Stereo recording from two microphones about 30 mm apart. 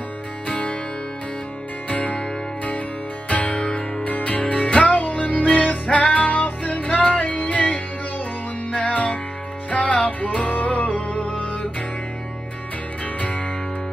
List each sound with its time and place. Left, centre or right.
0.5 s music: left
1.9 s music: left
5.0 s music: left
10.4 s music: left
13.0 s music: left